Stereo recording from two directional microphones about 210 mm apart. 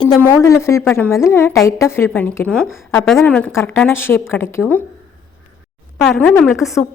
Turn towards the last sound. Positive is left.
turn(degrees=0)  # may be behind; listen again after turning